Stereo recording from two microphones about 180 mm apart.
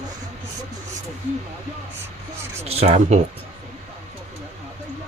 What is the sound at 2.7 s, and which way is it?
Speech, 35° right (ahead or behind).